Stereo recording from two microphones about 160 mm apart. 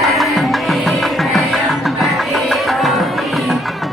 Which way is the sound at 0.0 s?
Centre (ahead or behind).